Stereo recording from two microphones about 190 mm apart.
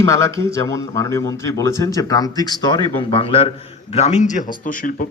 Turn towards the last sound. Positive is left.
turn(degrees=45)  # may be behind; listen again after turning